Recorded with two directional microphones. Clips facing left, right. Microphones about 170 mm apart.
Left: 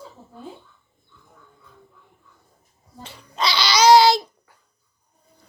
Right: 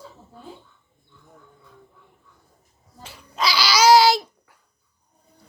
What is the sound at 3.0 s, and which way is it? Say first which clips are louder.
Babbling: even; 5° right (ahead or behind).